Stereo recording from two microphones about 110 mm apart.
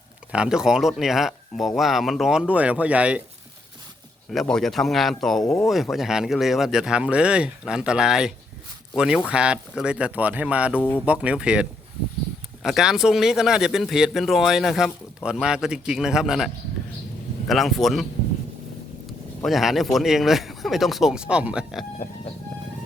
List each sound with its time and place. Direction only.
0.3 s speech: 10° right (ahead or behind)
4.3 s speech: 5° left (ahead or behind)
10.8 s speech: 20° left (ahead or behind)
11.0 s speech: 10° right (ahead or behind)
17.5 s speech: centre (ahead or behind)
19.4 s speech: centre (ahead or behind)